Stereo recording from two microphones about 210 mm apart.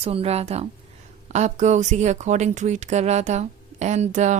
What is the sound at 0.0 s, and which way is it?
A woman's voice, 30° right (ahead or behind).